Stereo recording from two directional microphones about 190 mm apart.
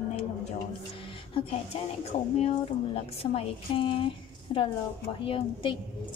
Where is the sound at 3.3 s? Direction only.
30° left (ahead or behind).